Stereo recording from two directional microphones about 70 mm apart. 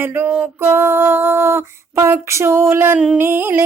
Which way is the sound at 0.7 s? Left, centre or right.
Right.